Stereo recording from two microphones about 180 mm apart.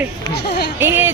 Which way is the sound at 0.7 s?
10° right (ahead or behind).